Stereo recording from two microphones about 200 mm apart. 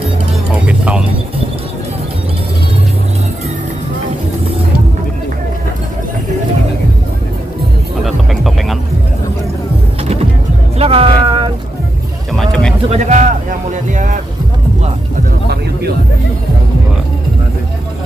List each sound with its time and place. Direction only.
0.7 s music: 5° right (ahead or behind)
8.0 s music: centre (ahead or behind)
10.8 s music: 30° right (ahead or behind)
12.4 s a sound: 5° left (ahead or behind)
12.9 s music: 35° right (ahead or behind)
15.4 s a sound: 50° right (ahead or behind)